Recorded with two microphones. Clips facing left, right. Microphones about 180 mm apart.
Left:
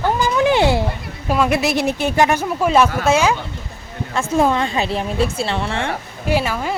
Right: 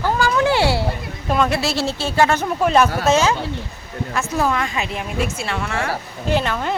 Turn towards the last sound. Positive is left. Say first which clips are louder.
# left 1 dB
turn(degrees=5)  # may be behind; listen again after turning